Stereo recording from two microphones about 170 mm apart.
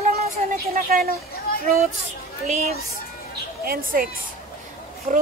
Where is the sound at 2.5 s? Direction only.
40° right (ahead or behind).